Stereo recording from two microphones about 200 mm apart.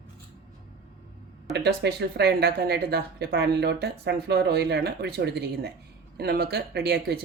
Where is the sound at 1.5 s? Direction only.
55° right (ahead or behind).